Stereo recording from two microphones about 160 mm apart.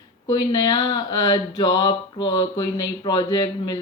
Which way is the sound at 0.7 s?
25° left (ahead or behind).